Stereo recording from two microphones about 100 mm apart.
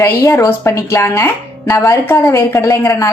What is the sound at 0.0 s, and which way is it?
Speech, 25° left (ahead or behind).